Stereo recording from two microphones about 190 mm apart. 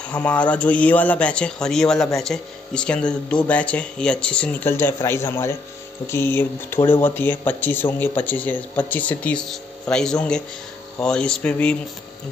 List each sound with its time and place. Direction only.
0.0 s speech: 5° left (ahead or behind)